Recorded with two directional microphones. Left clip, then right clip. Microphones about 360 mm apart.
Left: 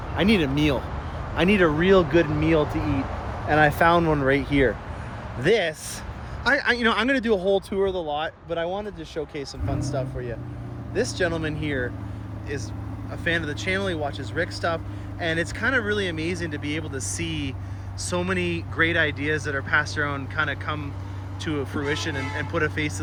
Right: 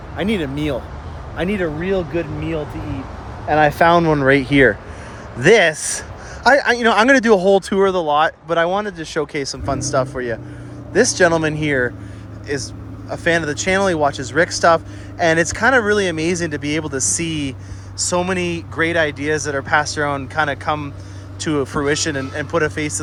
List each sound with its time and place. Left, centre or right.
0.2 s speech: centre
3.5 s speech: centre